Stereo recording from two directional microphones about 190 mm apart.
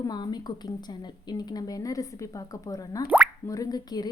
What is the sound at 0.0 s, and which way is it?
A woman's voice, 20° left (ahead or behind).